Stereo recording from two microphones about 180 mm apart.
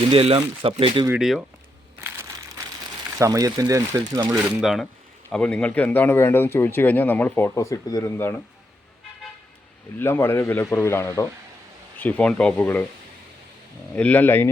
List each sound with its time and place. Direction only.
0.1 s speech: 30° right (ahead or behind)
1.2 s speech: centre (ahead or behind)
2.0 s crushing: 15° right (ahead or behind)
3.2 s speech: 20° right (ahead or behind)
4.3 s speech: centre (ahead or behind); by 8.4 s 15° left (ahead or behind)
10.0 s speech: 15° left (ahead or behind)
13.9 s speech: 10° left (ahead or behind)